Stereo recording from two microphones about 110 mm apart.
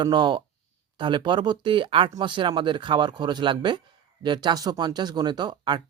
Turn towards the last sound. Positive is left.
turn(degrees=-45)  # may be behind; listen again after turning